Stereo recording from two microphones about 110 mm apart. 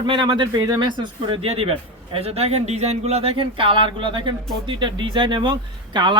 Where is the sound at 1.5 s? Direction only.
65° right (ahead or behind).